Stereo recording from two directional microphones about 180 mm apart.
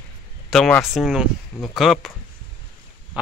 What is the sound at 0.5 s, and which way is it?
Speech, centre (ahead or behind).